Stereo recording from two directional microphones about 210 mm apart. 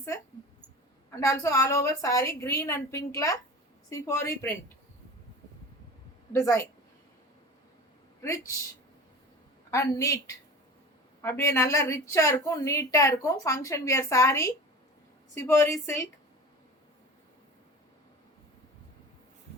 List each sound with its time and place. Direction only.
1.1 s speech: 15° left (ahead or behind)
6.3 s speech: 15° left (ahead or behind)
8.2 s speech: 15° left (ahead or behind)
9.7 s speech: 15° left (ahead or behind)